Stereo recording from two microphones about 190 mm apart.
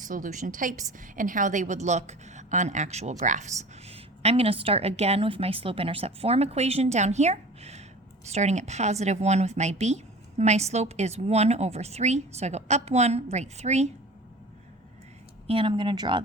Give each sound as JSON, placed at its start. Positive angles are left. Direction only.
{"t": 0.0, "sound": "a woman's voice", "side_deg": -45}
{"t": 15.4, "sound": "speech", "side_deg": -30}